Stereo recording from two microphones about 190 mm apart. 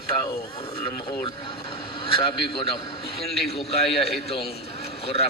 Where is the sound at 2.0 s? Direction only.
30° left (ahead or behind).